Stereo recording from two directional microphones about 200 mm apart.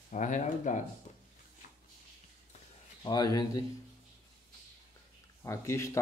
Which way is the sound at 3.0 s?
20° left (ahead or behind).